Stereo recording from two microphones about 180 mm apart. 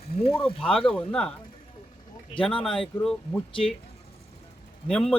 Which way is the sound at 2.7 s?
Centre (ahead or behind).